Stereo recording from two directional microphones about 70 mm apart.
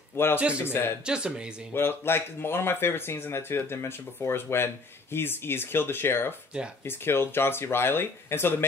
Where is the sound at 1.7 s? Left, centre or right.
Left.